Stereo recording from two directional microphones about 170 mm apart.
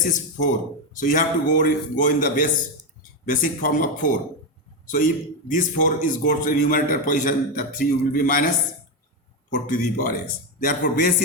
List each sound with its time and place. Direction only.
0.0 s a man's voice: 50° left (ahead or behind)
9.6 s a man's voice: 50° left (ahead or behind)